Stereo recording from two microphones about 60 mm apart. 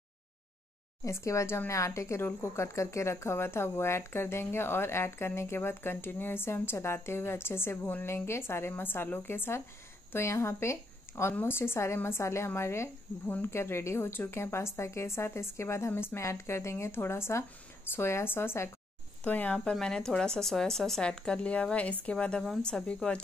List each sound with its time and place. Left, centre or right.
1.0 s a woman's voice: left
15.9 s a woman's voice: left
16.2 s a woman's voice: left
19.2 s speech: left
19.6 s speech: centre